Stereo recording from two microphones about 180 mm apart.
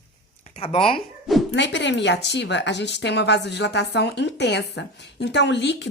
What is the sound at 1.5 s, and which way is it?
A woman's voice, 80° left.